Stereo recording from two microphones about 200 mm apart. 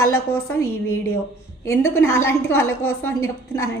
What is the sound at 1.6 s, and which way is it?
A woman's voice, 15° left (ahead or behind).